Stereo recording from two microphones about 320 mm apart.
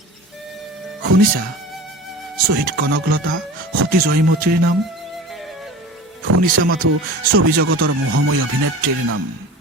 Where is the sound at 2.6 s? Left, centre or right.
Right.